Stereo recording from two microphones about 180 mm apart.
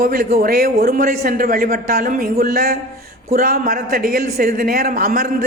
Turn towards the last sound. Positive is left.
turn(degrees=-55)  # may be behind; listen again after turning